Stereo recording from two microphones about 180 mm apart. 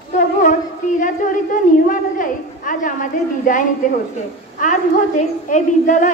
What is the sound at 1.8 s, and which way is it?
A woman's voice, 50° left (ahead or behind).